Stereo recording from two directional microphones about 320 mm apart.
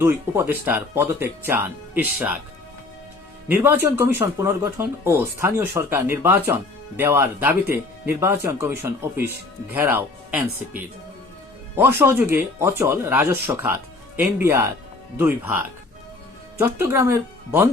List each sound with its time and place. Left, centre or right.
0.0 s speech: centre
3.5 s speech: centre
11.8 s speech: centre